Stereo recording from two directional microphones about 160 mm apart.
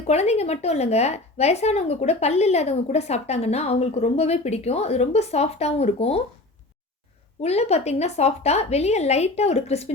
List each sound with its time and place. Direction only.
0.1 s speech: 40° left (ahead or behind)
7.4 s a woman's voice: 40° left (ahead or behind)